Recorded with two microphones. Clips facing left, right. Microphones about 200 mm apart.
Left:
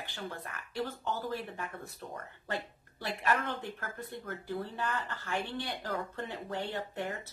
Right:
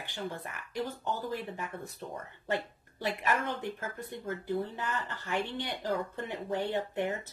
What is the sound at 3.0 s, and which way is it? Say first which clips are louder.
A woman's voice: right 1 dB; 15° right (ahead or behind).